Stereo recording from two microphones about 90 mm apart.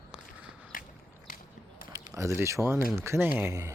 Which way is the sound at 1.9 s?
35° right (ahead or behind).